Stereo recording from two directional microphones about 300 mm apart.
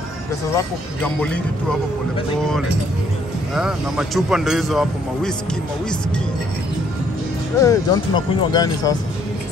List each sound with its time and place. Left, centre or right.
1.0 s speech: centre
3.5 s speech: centre
7.6 s speech: centre